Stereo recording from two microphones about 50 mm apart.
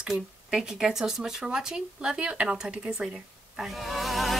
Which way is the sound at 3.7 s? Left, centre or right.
Centre.